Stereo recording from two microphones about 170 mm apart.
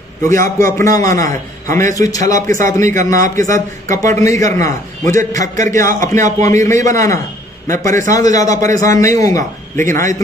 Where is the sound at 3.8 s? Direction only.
50° right (ahead or behind).